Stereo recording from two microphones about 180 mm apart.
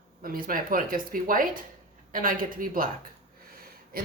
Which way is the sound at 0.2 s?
50° right (ahead or behind).